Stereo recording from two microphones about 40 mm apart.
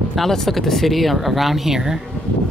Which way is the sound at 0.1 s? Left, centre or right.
Centre.